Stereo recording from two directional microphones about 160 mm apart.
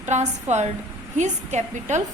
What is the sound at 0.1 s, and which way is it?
A woman's voice, 45° right (ahead or behind).